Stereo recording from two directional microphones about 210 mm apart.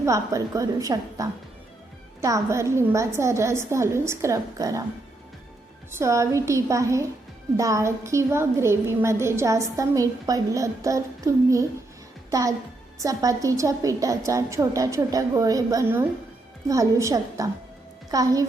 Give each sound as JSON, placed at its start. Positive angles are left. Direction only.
{"t": 0.0, "sound": "a woman's voice", "side_deg": -15}
{"t": 5.9, "sound": "a woman's voice", "side_deg": -15}